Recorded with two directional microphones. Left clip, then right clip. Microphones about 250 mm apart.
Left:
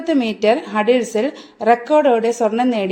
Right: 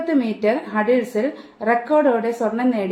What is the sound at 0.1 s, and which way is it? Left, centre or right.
A woman's voice, left.